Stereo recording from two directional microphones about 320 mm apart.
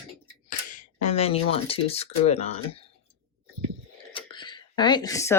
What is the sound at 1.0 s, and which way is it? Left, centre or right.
Speech, centre.